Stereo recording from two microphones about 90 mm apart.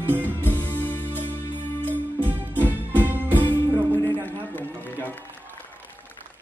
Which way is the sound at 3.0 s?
20° right (ahead or behind).